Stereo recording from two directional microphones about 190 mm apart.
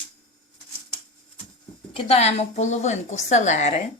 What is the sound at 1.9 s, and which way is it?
A woman's voice, 30° left (ahead or behind).